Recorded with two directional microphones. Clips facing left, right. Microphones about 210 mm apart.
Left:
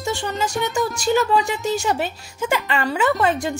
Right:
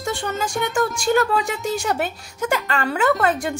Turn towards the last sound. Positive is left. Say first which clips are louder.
# even
turn(degrees=0)  # may be behind; listen again after turning